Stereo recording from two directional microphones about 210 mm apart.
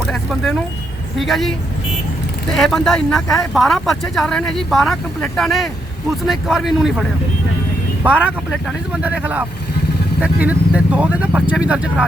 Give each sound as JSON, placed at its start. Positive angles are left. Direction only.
{"t": 0.1, "sound": "vehicle", "side_deg": 0}
{"t": 1.1, "sound": "speech", "side_deg": 0}
{"t": 2.6, "sound": "speech", "side_deg": 0}
{"t": 8.0, "sound": "speech", "side_deg": -5}